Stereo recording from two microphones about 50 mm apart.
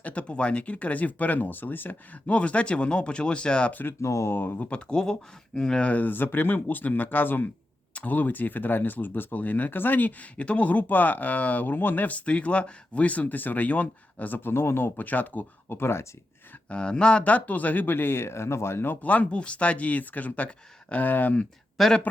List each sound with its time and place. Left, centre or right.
0.0 s speech: left
2.2 s speech: left
3.7 s speech: left
4.0 s speech: left
4.4 s speech: left
4.9 s speech: centre
5.8 s speech: left
10.3 s speech: left
14.9 s speech: left
15.7 s speech: left
16.6 s speech: left
19.0 s speech: left
21.8 s speech: centre